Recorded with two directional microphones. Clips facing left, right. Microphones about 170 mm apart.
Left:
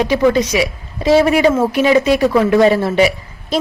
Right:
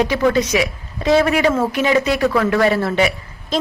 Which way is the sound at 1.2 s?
25° left (ahead or behind).